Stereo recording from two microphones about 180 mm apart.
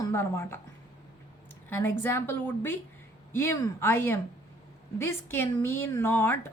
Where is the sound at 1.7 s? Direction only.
10° left (ahead or behind).